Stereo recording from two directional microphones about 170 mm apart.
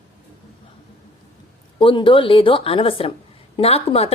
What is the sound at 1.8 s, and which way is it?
A woman's voice, 30° left (ahead or behind).